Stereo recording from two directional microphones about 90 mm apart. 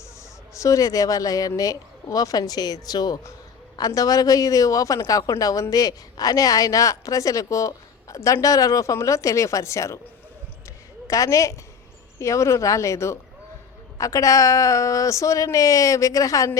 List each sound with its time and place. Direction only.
0.5 s speech: 35° left (ahead or behind)
11.1 s speech: 35° left (ahead or behind)